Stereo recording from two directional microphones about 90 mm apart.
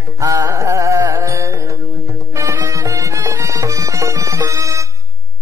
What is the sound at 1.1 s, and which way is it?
Music, 35° right (ahead or behind).